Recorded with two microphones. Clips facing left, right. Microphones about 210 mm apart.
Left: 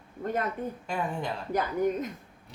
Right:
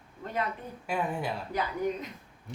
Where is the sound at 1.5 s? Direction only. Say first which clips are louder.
Left 6 dB; 50° left (ahead or behind).